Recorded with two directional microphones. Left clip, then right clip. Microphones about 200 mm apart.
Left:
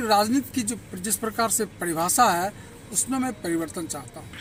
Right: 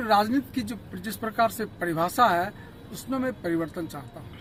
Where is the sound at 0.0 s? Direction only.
20° left (ahead or behind).